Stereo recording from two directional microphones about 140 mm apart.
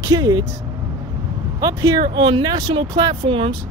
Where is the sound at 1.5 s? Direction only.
25° right (ahead or behind).